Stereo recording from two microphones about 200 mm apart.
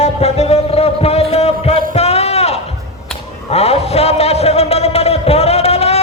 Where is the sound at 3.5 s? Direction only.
30° left (ahead or behind).